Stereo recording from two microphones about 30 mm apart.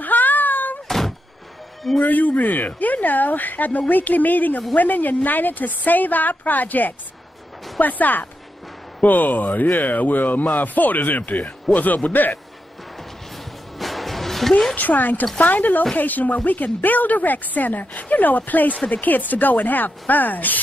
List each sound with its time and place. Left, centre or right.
0.0 s a sound: left
0.8 s thunk: centre
2.0 s a woman's voice: left
13.7 s music: centre
14.8 s a woman's voice: left